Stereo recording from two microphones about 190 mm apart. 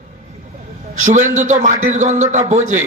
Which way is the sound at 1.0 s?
40° right (ahead or behind).